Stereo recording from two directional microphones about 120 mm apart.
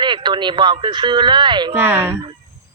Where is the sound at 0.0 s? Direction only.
40° right (ahead or behind).